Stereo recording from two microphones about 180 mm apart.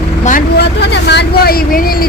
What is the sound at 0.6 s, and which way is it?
Vehicle, 70° left (ahead or behind).